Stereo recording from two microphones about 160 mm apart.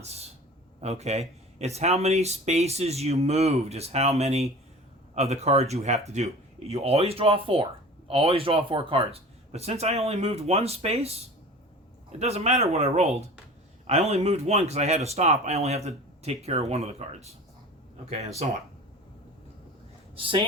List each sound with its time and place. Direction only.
0.0 s a man's voice: 40° right (ahead or behind)
12.2 s speech: 40° right (ahead or behind)
20.1 s speech: 35° right (ahead or behind)